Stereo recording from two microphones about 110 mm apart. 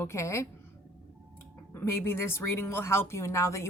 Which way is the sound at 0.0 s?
25° left (ahead or behind).